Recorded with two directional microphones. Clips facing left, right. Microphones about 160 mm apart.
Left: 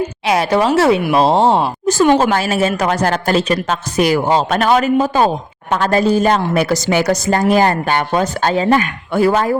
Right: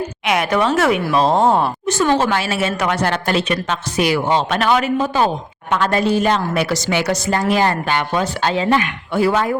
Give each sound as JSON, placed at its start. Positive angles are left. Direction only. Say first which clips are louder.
{"t": 0.3, "sound": "a woman's voice", "louder": "left 3 dB", "side_deg": 30}
{"t": 2.3, "sound": "a woman's voice", "louder": "left 4 dB", "side_deg": 40}